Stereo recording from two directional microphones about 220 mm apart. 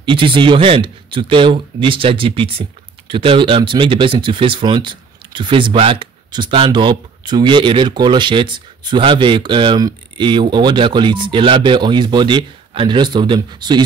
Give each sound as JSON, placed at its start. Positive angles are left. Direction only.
{"t": 0.0, "sound": "a man's voice", "side_deg": -20}